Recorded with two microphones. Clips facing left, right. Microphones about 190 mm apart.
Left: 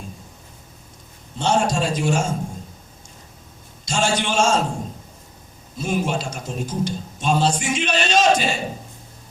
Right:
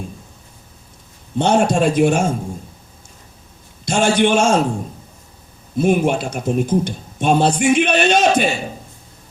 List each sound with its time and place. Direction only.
1.4 s speech: 55° right (ahead or behind)
3.8 s speech: 55° right (ahead or behind)
5.7 s speech: 55° right (ahead or behind)